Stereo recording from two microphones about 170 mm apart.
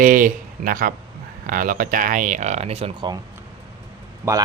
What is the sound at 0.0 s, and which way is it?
Speech, 50° right (ahead or behind).